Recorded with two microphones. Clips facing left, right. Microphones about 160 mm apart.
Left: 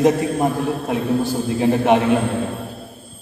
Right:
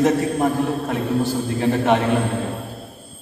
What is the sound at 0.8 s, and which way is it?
A man's voice, 15° left (ahead or behind).